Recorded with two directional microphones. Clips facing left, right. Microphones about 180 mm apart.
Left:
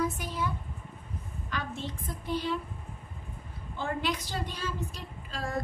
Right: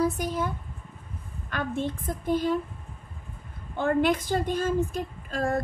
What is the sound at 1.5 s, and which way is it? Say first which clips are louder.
A woman's voice: right 7 dB; 55° right (ahead or behind).